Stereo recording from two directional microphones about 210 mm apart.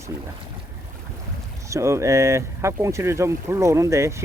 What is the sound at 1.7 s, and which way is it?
Speech, 15° right (ahead or behind).